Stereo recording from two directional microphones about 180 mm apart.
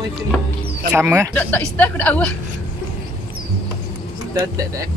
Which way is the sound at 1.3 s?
10° left (ahead or behind).